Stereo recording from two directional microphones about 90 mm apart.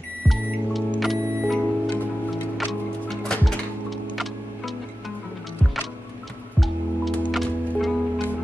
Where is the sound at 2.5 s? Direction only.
Centre (ahead or behind).